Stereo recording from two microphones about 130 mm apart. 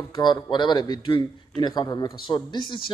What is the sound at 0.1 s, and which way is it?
A man's voice, 35° left (ahead or behind).